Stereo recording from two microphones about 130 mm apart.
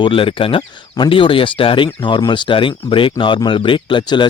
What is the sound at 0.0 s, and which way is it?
Speech, 45° left (ahead or behind).